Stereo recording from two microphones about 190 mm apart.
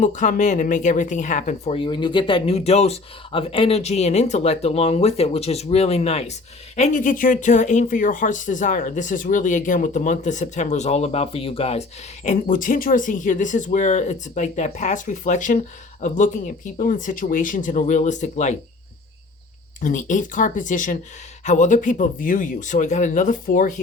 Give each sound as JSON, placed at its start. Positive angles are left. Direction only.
{"t": 0.0, "sound": "speech", "side_deg": 40}
{"t": 19.8, "sound": "speech", "side_deg": 40}